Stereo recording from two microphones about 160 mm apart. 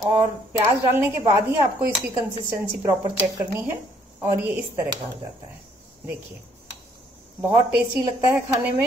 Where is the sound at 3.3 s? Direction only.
15° right (ahead or behind).